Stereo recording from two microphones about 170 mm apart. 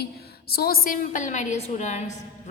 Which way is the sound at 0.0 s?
65° left (ahead or behind).